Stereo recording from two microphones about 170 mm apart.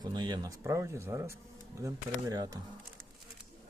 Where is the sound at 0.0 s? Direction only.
25° right (ahead or behind).